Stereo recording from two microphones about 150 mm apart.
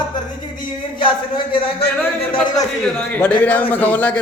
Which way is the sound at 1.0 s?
35° left (ahead or behind).